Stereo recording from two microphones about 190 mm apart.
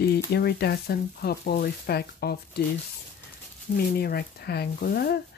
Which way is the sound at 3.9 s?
55° left (ahead or behind).